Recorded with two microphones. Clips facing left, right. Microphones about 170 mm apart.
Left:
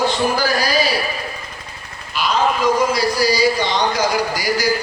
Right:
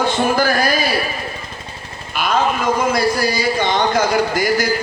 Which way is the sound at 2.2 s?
50° right (ahead or behind).